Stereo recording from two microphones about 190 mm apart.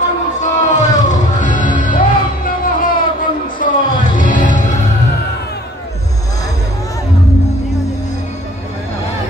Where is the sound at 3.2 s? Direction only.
45° left (ahead or behind).